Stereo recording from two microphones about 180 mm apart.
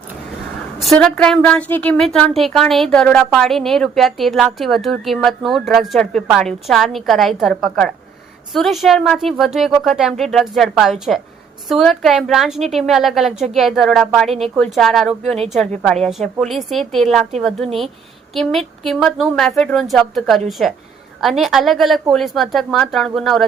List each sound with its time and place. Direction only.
0.8 s a woman's voice: centre (ahead or behind)